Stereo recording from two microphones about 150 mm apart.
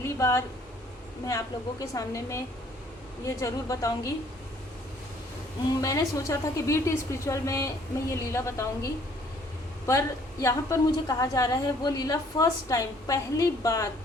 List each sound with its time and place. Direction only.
0.0 s a sound: 20° left (ahead or behind)
1.3 s a woman's voice: 20° left (ahead or behind)
5.8 s a woman's voice: 20° left (ahead or behind)
10.4 s a woman's voice: 20° left (ahead or behind)